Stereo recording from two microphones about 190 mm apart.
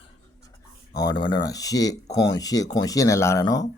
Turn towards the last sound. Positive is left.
turn(degrees=20)  # may be behind; listen again after turning